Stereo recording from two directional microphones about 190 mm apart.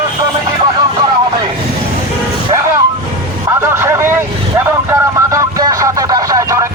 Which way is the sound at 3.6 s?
15° right (ahead or behind).